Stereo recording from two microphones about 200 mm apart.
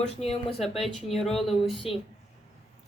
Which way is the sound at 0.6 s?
Centre (ahead or behind).